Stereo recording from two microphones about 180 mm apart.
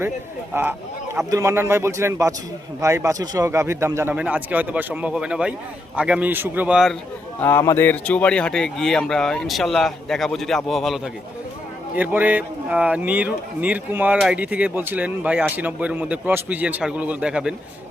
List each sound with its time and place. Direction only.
0.5 s speech: 10° right (ahead or behind)
7.4 s speech: 15° left (ahead or behind); by 17.5 s 5° right (ahead or behind)